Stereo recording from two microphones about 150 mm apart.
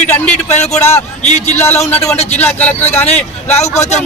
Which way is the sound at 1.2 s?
50° left (ahead or behind).